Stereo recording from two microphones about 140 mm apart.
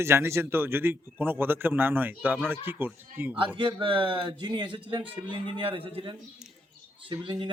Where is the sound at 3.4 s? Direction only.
35° right (ahead or behind).